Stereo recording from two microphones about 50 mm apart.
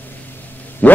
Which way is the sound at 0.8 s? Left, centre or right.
Left.